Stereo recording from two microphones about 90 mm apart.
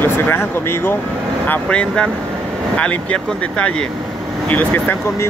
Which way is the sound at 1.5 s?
10° left (ahead or behind).